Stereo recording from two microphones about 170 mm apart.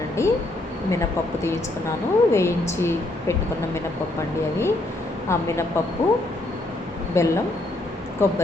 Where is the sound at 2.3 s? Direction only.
15° left (ahead or behind).